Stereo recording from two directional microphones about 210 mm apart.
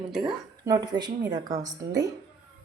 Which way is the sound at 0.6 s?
15° right (ahead or behind).